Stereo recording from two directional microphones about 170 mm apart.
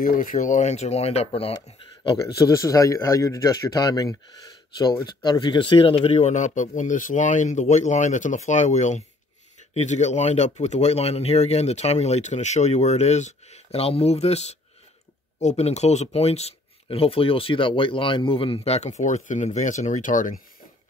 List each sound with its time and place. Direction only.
0.0 s speech: 55° left (ahead or behind)